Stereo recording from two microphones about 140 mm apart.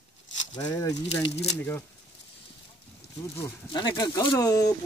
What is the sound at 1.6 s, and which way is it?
Speech, 15° left (ahead or behind).